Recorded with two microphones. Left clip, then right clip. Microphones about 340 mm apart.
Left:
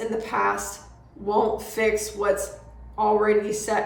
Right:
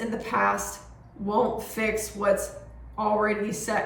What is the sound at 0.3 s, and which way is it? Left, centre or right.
A woman's voice, centre.